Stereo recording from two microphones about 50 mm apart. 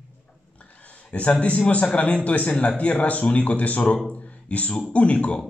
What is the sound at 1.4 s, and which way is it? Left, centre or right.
A man's voice, left.